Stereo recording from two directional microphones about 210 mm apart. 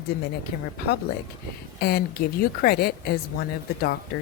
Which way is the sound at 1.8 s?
50° left (ahead or behind).